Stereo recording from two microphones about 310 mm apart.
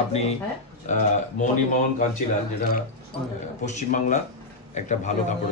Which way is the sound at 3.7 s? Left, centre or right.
Left.